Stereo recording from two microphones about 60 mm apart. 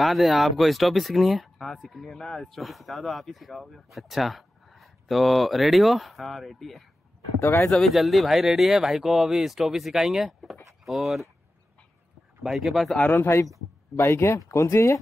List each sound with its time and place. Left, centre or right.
0.0 s speech: centre
12.4 s speech: centre
13.1 s speech: left